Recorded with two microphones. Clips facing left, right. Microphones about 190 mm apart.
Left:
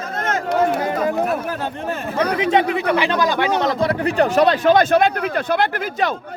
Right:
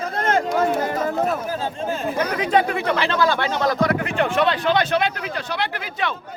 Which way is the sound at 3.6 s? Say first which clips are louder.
Left 1 dB; 30° left (ahead or behind).